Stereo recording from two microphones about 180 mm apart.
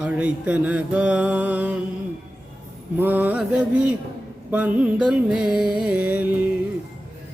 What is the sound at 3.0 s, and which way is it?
Mantra, 10° right (ahead or behind).